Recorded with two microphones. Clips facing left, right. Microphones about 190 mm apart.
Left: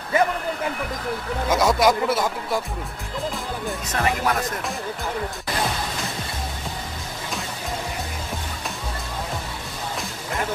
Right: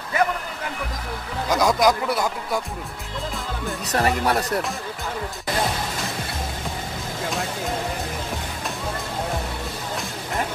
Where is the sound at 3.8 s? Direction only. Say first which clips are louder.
Right 3 dB; 35° right (ahead or behind).